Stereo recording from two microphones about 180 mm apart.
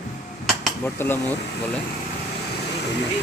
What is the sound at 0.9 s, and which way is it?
Speech, 10° left (ahead or behind).